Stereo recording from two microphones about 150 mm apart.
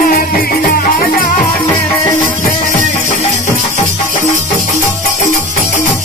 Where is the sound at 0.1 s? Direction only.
70° left (ahead or behind).